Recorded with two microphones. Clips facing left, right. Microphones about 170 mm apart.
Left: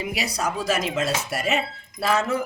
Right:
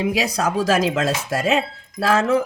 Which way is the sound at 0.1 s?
90° right.